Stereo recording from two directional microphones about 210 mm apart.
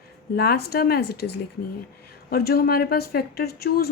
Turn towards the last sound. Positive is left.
turn(degrees=45)  # may be behind; listen again after turning